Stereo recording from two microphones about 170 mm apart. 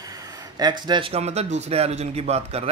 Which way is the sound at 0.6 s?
25° right (ahead or behind).